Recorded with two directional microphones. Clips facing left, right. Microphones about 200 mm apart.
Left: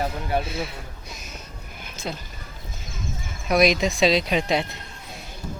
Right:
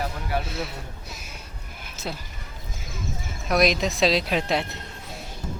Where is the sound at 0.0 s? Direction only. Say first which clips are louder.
Left 3 dB; 25° left (ahead or behind).